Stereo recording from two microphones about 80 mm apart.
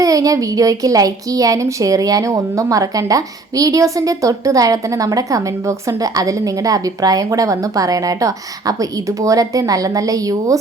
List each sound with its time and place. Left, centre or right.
0.0 s a woman's voice: right